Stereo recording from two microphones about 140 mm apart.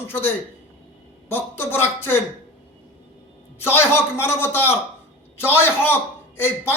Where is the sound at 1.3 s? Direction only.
15° left (ahead or behind).